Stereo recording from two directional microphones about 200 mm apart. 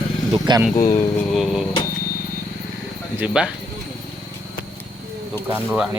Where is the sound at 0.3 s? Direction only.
20° right (ahead or behind).